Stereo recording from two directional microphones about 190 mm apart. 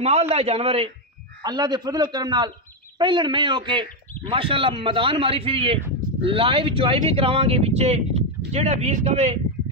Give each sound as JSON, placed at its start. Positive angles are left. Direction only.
{"t": 0.0, "sound": "speech", "side_deg": -35}
{"t": 1.4, "sound": "speech", "side_deg": -20}